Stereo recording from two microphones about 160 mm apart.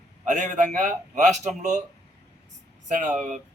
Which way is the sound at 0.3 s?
50° right (ahead or behind).